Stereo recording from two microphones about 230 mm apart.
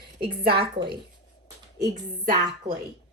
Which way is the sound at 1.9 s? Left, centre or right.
Right.